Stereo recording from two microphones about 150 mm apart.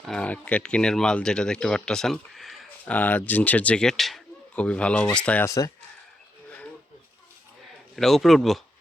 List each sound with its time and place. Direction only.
0.0 s speech: 5° left (ahead or behind)
5.5 s speech: 20° left (ahead or behind)
7.9 s speech: centre (ahead or behind)